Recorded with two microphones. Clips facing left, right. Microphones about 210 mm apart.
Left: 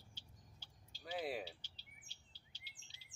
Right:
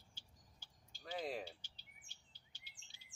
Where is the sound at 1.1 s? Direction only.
5° left (ahead or behind).